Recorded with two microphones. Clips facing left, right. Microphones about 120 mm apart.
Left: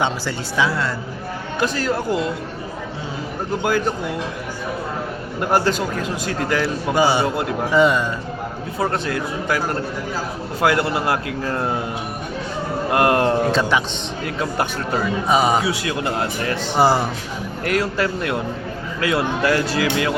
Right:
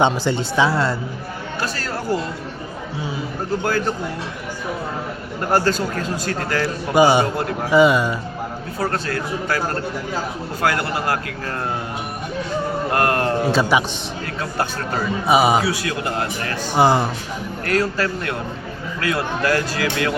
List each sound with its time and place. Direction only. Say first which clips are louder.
0.0 s a woman's voice: right 5 dB; 25° right (ahead or behind)
1.5 s a man's voice: left 6 dB; 15° left (ahead or behind)
5.4 s a man's voice: even; 15° left (ahead or behind)
6.9 s a man's voice: right 4 dB; 15° right (ahead or behind)
8.9 s a man's voice: left 1 dB; 15° left (ahead or behind)
10.6 s speech: left 3 dB; 20° left (ahead or behind)
12.9 s speech: left 4 dB; 20° left (ahead or behind)
13.4 s a man's voice: right 1 dB; 10° right (ahead or behind)
15.3 s a man's voice: right 2 dB; 10° right (ahead or behind)
15.6 s speech: left 1 dB; 20° left (ahead or behind)
16.7 s speech: right 1 dB; centre (ahead or behind)
17.7 s a man's voice: even; 20° left (ahead or behind)